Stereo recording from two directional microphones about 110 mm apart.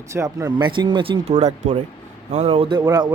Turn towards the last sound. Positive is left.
turn(degrees=-40)  # may be behind; listen again after turning